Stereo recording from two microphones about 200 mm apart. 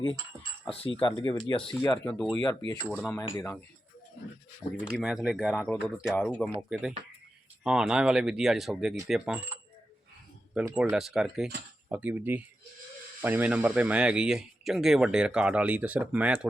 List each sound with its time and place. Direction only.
0.7 s speech: 30° left (ahead or behind)
1.8 s speech: 10° left (ahead or behind)
4.9 s speech: 5° right (ahead or behind)
6.1 s speech: 10° left (ahead or behind)
6.6 s speech: 5° right (ahead or behind)
10.8 s speech: 5° right (ahead or behind)